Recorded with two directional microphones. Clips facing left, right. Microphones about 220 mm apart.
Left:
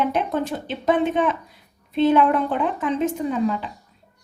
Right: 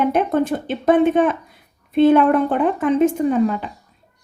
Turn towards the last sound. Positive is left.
turn(degrees=-55)  # may be behind; listen again after turning